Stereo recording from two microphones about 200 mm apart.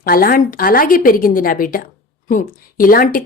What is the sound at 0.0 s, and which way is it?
A woman's voice, 45° left (ahead or behind).